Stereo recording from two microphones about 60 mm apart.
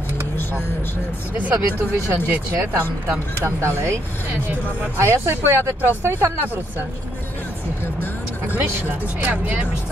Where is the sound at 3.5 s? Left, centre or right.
Right.